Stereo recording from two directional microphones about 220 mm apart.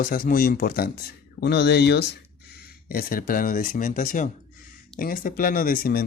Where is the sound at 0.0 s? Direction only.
40° left (ahead or behind).